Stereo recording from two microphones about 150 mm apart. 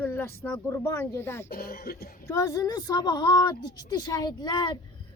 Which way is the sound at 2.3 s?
20° left (ahead or behind).